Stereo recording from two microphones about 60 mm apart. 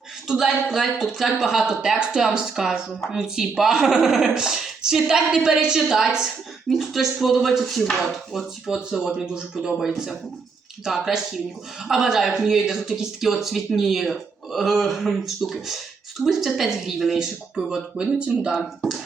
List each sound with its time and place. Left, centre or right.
0.3 s speech: centre
6.7 s dishes: centre
8.9 s speech: centre
9.8 s dishes: centre
11.9 s speech: centre
13.7 s dishes: centre
16.2 s speech: centre
18.8 s speech: centre